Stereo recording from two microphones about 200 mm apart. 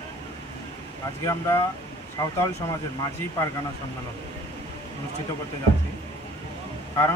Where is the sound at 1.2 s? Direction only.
15° left (ahead or behind).